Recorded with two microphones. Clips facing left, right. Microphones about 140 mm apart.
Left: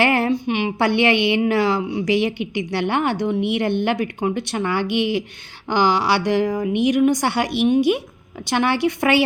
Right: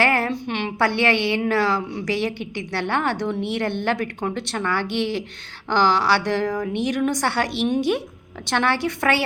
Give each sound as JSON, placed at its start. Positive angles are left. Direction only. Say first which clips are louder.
{"t": 0.0, "sound": "a woman's voice", "louder": "left 3 dB", "side_deg": 20}